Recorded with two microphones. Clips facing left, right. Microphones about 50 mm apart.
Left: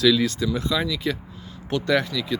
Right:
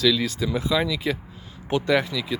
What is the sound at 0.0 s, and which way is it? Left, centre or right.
Speech, centre.